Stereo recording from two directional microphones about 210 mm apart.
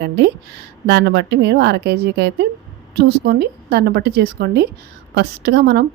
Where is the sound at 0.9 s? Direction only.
55° right (ahead or behind).